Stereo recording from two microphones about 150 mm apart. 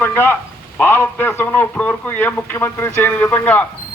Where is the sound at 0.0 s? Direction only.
15° left (ahead or behind).